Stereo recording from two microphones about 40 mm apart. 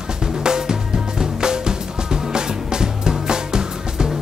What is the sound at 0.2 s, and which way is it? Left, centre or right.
Music, centre.